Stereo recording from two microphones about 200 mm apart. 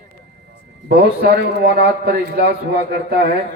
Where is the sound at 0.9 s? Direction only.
55° right (ahead or behind).